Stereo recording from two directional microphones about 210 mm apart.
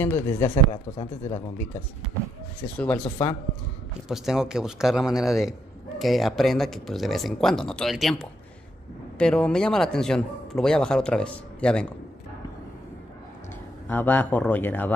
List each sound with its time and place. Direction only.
0.0 s speech: 10° left (ahead or behind)
0.9 s speech: 30° left (ahead or behind)
2.8 s speech: 5° left (ahead or behind)
4.1 s a man's voice: 5° right (ahead or behind)
13.8 s speech: 10° left (ahead or behind)